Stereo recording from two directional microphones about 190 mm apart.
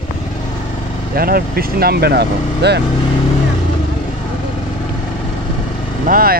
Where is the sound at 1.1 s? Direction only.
55° right (ahead or behind).